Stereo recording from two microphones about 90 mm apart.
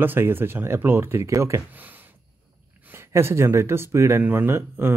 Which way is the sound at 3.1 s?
30° right (ahead or behind).